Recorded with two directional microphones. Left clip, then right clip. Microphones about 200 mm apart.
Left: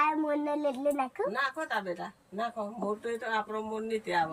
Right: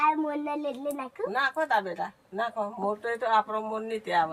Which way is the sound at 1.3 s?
20° right (ahead or behind).